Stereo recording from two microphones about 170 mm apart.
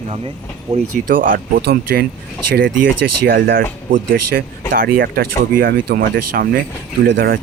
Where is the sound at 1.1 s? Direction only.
55° right (ahead or behind).